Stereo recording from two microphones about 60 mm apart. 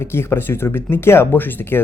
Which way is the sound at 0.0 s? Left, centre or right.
Left.